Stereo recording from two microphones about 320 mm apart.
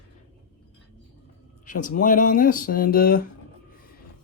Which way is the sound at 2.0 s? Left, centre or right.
Left.